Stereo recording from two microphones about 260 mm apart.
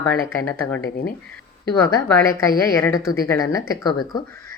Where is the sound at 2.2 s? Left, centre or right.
Centre.